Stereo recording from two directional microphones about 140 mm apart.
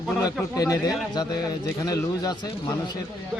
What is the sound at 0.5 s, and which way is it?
Speech, 25° left (ahead or behind).